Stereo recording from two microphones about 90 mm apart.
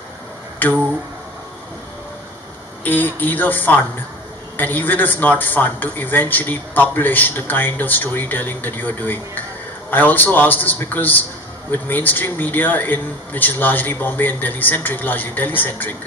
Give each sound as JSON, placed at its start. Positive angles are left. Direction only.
{"t": 0.6, "sound": "a man's voice", "side_deg": 20}
{"t": 2.8, "sound": "a man's voice", "side_deg": 20}